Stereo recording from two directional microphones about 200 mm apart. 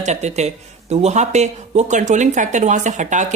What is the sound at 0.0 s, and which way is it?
Speech, 35° right (ahead or behind).